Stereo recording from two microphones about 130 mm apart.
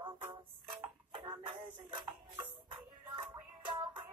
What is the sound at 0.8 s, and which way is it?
Music, 40° right (ahead or behind).